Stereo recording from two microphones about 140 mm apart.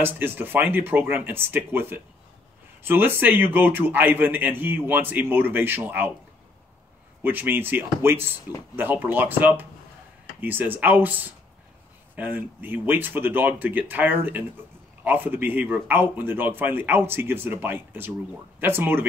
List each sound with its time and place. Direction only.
0.0 s a man's voice: 15° right (ahead or behind)
7.2 s a man's voice: 15° right (ahead or behind)